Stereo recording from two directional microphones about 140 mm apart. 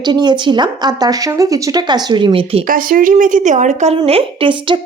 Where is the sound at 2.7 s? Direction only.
85° right; by 4.0 s 55° right (ahead or behind).